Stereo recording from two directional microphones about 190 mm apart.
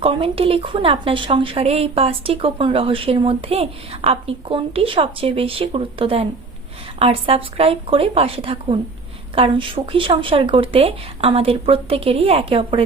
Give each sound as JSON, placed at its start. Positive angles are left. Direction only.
{"t": 0.0, "sound": "a woman's voice", "side_deg": -30}